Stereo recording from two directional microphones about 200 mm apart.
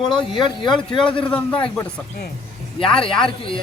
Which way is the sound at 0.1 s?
25° left (ahead or behind).